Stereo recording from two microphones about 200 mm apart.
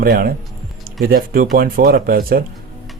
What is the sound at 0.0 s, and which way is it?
Speech, 50° right (ahead or behind).